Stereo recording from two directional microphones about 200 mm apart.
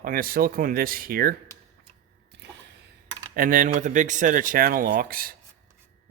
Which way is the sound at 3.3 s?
40° right (ahead or behind).